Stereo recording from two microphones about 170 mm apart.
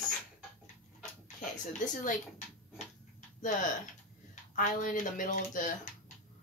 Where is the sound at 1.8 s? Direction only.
50° left (ahead or behind).